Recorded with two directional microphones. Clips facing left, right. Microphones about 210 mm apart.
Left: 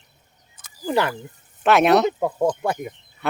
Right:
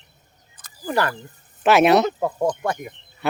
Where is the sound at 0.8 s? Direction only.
15° left (ahead or behind).